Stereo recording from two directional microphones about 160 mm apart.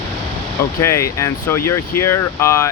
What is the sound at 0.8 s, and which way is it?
Speech, 15° left (ahead or behind).